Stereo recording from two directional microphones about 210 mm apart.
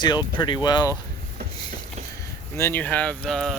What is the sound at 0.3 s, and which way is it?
Speech, 20° left (ahead or behind).